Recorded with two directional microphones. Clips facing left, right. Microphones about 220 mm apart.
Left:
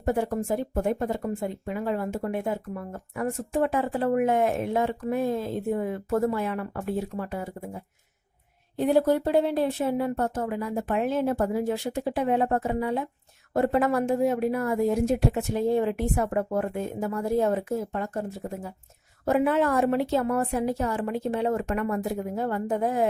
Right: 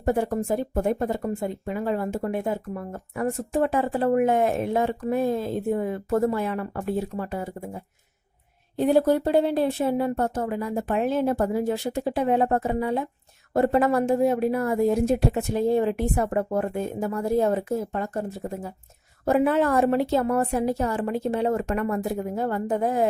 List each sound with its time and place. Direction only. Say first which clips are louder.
0.0 s speech: right 2 dB; 35° right (ahead or behind)